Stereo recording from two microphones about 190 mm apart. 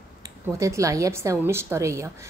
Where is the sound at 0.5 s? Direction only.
15° right (ahead or behind).